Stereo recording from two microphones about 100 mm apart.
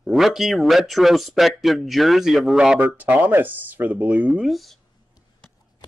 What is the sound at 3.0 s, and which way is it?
Speech, 15° right (ahead or behind).